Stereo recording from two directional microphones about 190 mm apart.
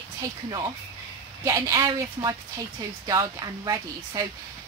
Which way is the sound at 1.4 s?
15° right (ahead or behind).